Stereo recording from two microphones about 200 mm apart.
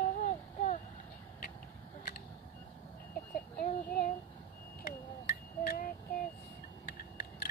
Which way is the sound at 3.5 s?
50° left (ahead or behind).